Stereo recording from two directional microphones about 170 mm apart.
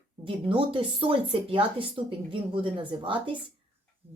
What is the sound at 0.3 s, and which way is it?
Speech, 30° right (ahead or behind).